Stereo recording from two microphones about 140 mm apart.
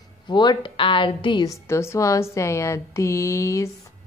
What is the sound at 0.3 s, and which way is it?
A woman's voice, 30° left (ahead or behind).